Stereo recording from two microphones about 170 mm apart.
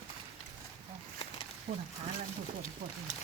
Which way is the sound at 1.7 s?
55° right (ahead or behind).